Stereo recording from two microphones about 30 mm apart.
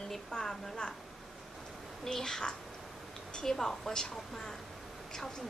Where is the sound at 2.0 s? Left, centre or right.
Centre.